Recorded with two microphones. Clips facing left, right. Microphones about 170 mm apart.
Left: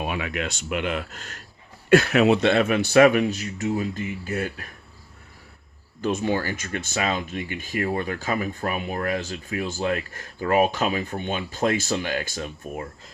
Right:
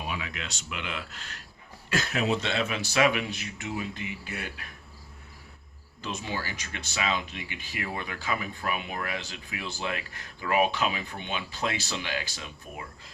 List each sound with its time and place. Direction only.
0.0 s speech: 55° left (ahead or behind)
1.9 s speech: 65° left (ahead or behind); by 4.7 s 45° left (ahead or behind)
6.0 s speech: 50° left (ahead or behind)